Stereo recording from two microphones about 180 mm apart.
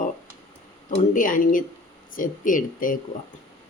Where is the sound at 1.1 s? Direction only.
45° left (ahead or behind).